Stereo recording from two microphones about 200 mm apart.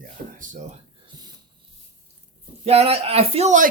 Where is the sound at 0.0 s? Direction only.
40° right (ahead or behind).